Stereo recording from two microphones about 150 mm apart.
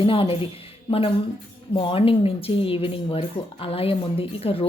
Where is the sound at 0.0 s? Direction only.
35° left (ahead or behind).